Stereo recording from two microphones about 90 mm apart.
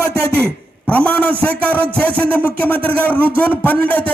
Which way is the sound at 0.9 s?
15° left (ahead or behind).